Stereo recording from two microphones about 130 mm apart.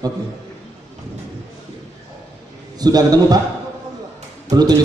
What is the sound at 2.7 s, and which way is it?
Speech, 30° right (ahead or behind).